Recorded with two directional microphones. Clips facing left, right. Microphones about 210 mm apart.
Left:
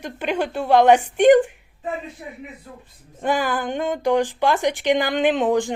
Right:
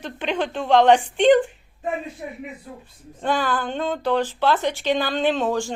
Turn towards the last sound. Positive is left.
turn(degrees=20)  # may be behind; listen again after turning